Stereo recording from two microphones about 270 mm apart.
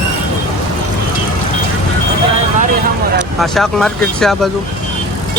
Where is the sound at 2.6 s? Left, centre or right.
Right.